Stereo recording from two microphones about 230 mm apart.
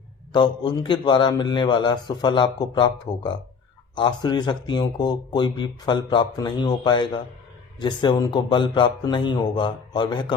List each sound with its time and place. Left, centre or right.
0.3 s speech: centre